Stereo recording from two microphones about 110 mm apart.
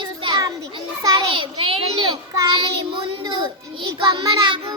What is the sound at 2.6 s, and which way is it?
Child singing, 50° right (ahead or behind).